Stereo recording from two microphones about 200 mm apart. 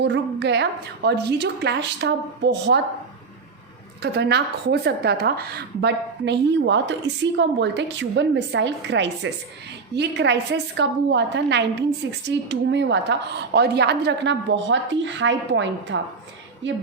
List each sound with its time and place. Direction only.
0.0 s a woman's voice: 60° right (ahead or behind)
4.0 s a woman's voice: 55° right (ahead or behind)